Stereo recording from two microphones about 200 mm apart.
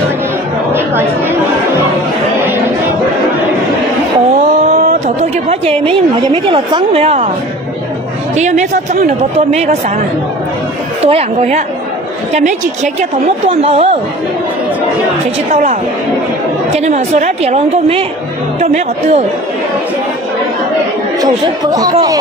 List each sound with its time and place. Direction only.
0.7 s chatter: 10° right (ahead or behind)
5.0 s a woman's voice: 35° right (ahead or behind)
8.4 s speech: 35° right (ahead or behind)
11.0 s speech: 30° right (ahead or behind)
16.7 s speech: 35° right (ahead or behind)
21.2 s speech: 20° right (ahead or behind)